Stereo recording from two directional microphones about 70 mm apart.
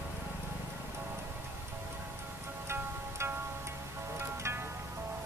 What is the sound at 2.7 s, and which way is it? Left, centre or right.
Music, right.